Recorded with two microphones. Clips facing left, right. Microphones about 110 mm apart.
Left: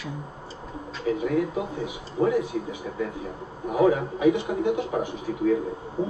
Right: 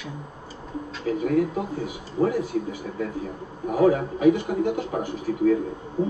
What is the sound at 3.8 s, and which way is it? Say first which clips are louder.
A man's voice: right 1 dB; 45° right (ahead or behind).